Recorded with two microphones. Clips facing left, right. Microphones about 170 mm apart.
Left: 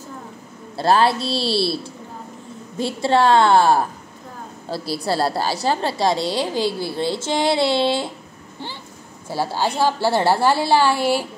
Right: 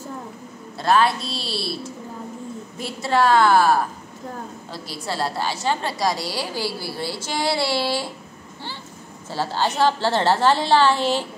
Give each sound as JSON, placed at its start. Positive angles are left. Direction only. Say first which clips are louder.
{"t": 0.7, "sound": "a woman's voice", "louder": "left 2 dB", "side_deg": 30}
{"t": 9.3, "sound": "a woman's voice", "louder": "left 2 dB", "side_deg": 10}